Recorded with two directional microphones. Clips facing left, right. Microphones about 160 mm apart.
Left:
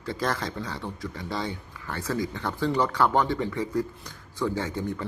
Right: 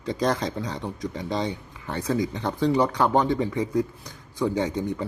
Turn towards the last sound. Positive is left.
turn(degrees=-20)  # may be behind; listen again after turning